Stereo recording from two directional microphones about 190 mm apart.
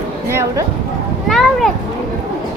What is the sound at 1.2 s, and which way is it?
Children playing, centre (ahead or behind).